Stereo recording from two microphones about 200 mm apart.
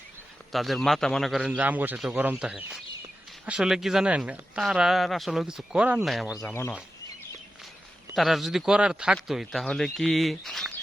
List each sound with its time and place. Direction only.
0.5 s speech: centre (ahead or behind)
6.5 s speech: 10° left (ahead or behind)
8.1 s speech: centre (ahead or behind)